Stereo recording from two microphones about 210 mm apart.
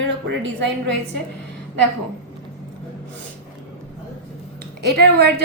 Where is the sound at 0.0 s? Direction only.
60° right (ahead or behind).